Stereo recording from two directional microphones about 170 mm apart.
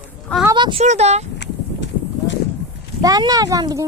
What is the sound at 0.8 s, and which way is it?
Speech, 40° right (ahead or behind).